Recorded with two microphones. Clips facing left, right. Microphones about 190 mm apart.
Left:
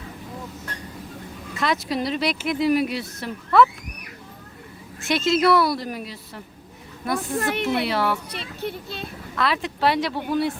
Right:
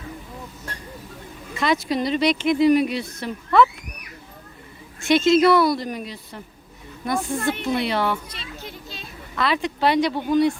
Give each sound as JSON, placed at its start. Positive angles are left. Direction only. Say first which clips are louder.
{"t": 1.5, "sound": "speech", "louder": "right 2 dB", "side_deg": 0}
{"t": 4.9, "sound": "speech", "louder": "right 5 dB", "side_deg": 0}
{"t": 7.3, "sound": "a woman's voice", "louder": "left 3 dB", "side_deg": 70}
{"t": 7.9, "sound": "speech", "louder": "even", "side_deg": 5}
{"t": 8.3, "sound": "speech", "louder": "left 7 dB", "side_deg": 60}
{"t": 9.3, "sound": "speech", "louder": "right 2 dB", "side_deg": 0}